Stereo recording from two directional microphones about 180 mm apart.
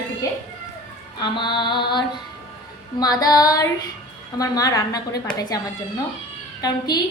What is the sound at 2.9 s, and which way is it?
A woman's voice, 20° left (ahead or behind).